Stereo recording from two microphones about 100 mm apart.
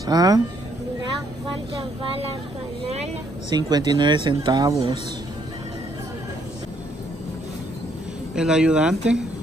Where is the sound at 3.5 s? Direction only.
45° right (ahead or behind).